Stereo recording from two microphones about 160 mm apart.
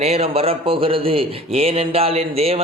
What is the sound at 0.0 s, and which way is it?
A man's voice, 40° right (ahead or behind).